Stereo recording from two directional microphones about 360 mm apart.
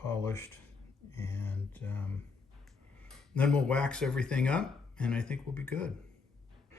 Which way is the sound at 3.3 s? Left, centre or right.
Centre.